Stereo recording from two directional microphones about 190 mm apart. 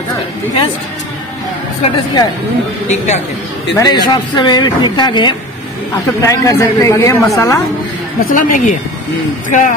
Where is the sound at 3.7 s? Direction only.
20° left (ahead or behind).